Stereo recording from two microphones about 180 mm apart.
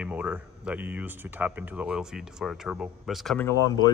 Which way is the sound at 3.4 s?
20° left (ahead or behind).